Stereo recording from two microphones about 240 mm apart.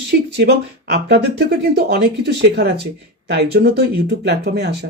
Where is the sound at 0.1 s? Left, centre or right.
Right.